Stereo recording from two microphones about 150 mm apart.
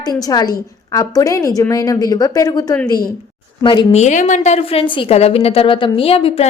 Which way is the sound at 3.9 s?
50° left (ahead or behind).